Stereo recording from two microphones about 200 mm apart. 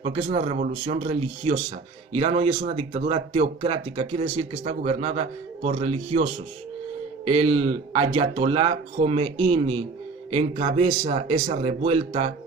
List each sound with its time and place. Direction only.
0.0 s speech: 35° right (ahead or behind)
7.3 s speech: 30° right (ahead or behind)